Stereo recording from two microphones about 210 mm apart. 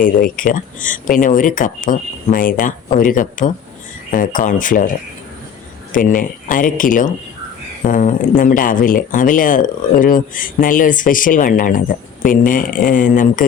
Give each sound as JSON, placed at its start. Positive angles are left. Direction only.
{"t": 0.0, "sound": "speech", "side_deg": 40}
{"t": 5.9, "sound": "speech", "side_deg": 40}